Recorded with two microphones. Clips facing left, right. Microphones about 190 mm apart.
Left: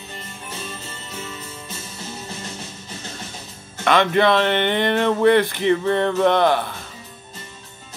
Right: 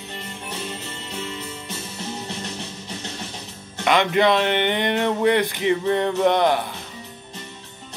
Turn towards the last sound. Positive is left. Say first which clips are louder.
# left 1 dB
turn(degrees=-15)  # may be behind; listen again after turning